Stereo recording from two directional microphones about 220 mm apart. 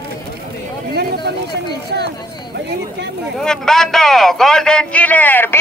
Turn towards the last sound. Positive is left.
turn(degrees=10)  # may be behind; listen again after turning